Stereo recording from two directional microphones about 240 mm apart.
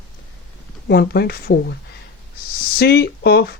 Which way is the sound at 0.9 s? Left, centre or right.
Left.